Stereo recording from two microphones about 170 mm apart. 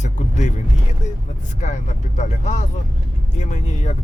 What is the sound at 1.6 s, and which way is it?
Speech, 45° left (ahead or behind).